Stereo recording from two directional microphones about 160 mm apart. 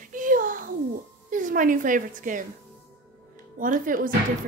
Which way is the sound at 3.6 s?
55° right (ahead or behind).